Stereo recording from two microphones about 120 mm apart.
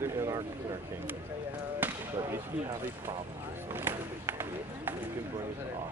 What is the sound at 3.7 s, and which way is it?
Run, 15° right (ahead or behind).